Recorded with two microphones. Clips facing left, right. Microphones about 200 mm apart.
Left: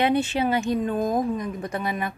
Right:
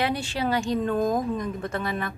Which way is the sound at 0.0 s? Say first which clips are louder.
Left 5 dB; 20° left (ahead or behind).